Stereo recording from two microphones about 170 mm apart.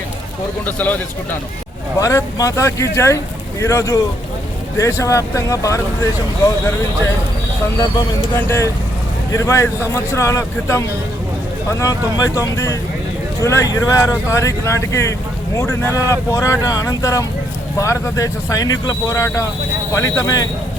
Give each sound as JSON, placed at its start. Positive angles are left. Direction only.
{"t": 0.6, "sound": "speech", "side_deg": 10}
{"t": 2.0, "sound": "speech", "side_deg": 20}
{"t": 8.4, "sound": "speech", "side_deg": 15}